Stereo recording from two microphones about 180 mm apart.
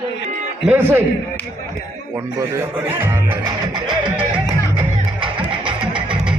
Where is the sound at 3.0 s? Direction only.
15° right (ahead or behind).